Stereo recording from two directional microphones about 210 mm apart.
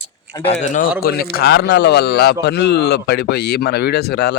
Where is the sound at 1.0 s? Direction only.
45° left (ahead or behind).